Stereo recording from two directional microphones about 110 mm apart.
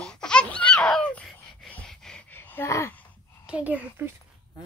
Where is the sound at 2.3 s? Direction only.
20° left (ahead or behind).